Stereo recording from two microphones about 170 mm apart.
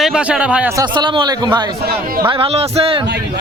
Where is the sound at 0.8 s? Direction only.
25° right (ahead or behind).